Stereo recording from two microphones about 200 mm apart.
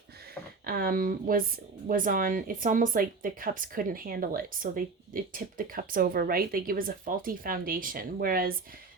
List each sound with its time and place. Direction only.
0.6 s speech: 45° right (ahead or behind)